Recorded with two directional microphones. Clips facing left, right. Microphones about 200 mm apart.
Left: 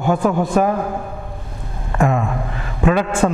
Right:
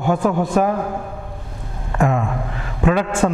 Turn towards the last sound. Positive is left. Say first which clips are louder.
# left 1 dB
turn(degrees=20)  # may be behind; listen again after turning